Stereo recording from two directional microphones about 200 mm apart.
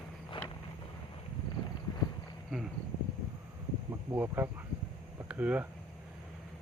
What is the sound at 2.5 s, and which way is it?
Cricket, centre (ahead or behind).